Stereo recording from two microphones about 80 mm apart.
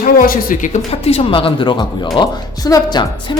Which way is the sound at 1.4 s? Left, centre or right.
Left.